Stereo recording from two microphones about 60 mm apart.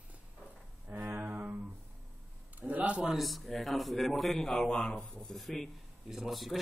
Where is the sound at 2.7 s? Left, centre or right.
Right.